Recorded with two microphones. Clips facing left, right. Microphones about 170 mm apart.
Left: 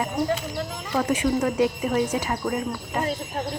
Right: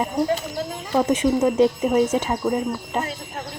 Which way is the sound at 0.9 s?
25° right (ahead or behind).